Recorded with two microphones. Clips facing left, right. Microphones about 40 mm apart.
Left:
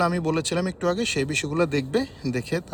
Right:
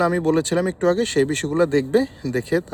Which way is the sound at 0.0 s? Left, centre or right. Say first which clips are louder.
Right 5 dB; right.